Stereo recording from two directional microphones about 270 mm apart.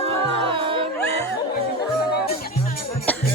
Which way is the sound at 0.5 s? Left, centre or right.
Centre.